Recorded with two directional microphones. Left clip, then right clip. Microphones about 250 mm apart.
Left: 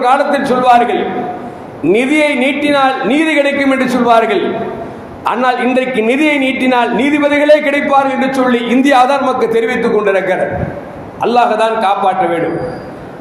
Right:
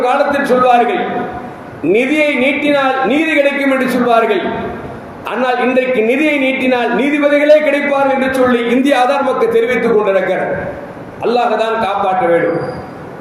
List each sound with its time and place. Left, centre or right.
0.0 s a woman's voice: centre